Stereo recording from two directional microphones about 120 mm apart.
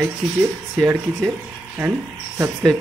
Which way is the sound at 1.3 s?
15° right (ahead or behind).